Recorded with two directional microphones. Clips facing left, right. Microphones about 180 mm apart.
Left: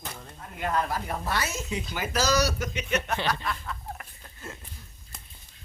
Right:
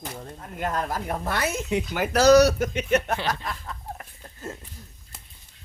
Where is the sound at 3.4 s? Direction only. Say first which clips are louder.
Left 1 dB; 35° right (ahead or behind).